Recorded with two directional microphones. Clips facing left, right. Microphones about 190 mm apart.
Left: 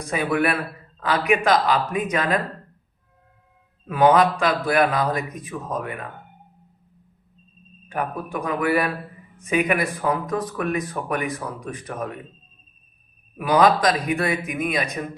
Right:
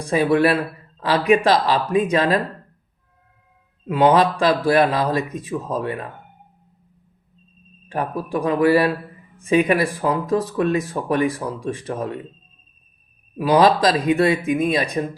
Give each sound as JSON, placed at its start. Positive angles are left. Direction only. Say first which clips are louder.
{"t": 0.0, "sound": "speech", "louder": "right 5 dB", "side_deg": -30}
{"t": 3.8, "sound": "speech", "louder": "right 1 dB", "side_deg": -25}
{"t": 7.9, "sound": "speech", "louder": "right 3 dB", "side_deg": -30}
{"t": 13.4, "sound": "speech", "louder": "right 2 dB", "side_deg": -30}